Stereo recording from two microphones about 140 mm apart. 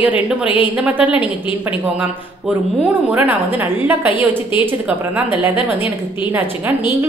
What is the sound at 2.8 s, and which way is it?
A woman's voice, 10° right (ahead or behind).